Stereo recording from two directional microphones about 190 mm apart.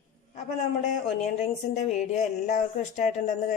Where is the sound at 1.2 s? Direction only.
35° left (ahead or behind).